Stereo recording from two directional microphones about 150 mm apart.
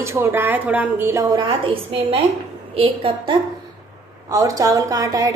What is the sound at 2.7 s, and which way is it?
Speech, 35° right (ahead or behind).